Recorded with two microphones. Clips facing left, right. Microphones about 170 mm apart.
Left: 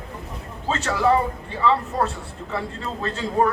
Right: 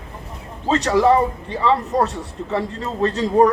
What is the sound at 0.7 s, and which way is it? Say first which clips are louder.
A man's voice: right 5 dB; 35° right (ahead or behind).